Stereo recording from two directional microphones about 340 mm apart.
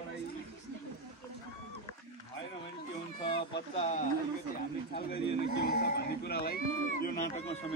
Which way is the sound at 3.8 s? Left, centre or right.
Left.